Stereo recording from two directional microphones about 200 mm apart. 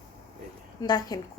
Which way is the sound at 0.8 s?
20° left (ahead or behind).